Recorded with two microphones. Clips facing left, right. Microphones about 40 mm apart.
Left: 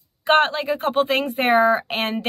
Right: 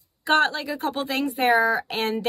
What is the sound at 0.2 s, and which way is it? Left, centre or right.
Speech, left.